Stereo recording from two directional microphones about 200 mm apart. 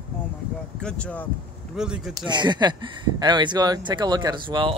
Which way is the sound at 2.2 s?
20° right (ahead or behind).